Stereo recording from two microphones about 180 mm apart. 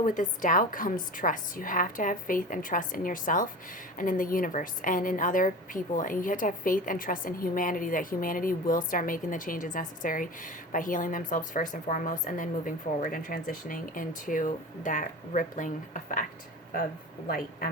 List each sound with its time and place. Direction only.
0.0 s a woman's voice: 45° left (ahead or behind)
17.2 s a woman's voice: 50° left (ahead or behind)